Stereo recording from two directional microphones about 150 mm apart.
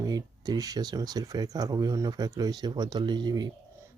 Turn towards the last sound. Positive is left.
turn(degrees=-30)  # may be behind; listen again after turning